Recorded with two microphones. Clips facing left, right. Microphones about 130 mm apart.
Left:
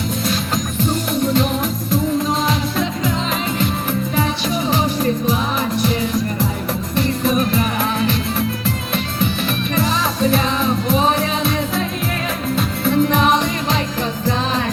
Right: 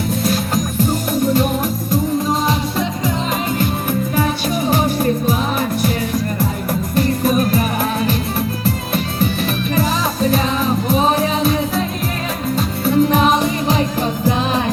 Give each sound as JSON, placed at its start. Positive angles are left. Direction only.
{"t": 1.3, "sound": "music", "side_deg": -40}
{"t": 4.1, "sound": "music", "side_deg": -45}
{"t": 6.9, "sound": "music", "side_deg": -45}
{"t": 12.5, "sound": "music", "side_deg": -35}